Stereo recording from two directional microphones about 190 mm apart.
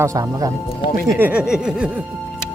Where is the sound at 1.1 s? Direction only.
10° right (ahead or behind).